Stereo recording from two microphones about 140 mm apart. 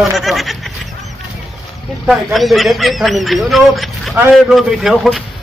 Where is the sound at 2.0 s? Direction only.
Centre (ahead or behind).